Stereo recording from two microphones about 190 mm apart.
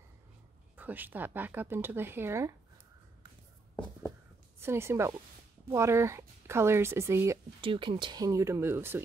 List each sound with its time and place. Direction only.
0.7 s speech: 10° right (ahead or behind)
4.6 s speech: 15° right (ahead or behind)
7.6 s speech: 25° right (ahead or behind); by 9.0 s 10° right (ahead or behind)